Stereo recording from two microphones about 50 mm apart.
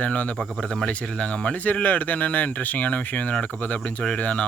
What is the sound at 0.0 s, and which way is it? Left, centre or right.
Speech, left.